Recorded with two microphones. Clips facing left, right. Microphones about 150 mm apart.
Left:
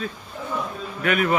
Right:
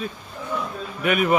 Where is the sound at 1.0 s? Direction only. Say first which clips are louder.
Right 1 dB; 10° right (ahead or behind).